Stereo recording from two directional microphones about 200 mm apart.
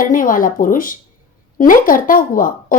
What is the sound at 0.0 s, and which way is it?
A woman's voice, 45° left (ahead or behind).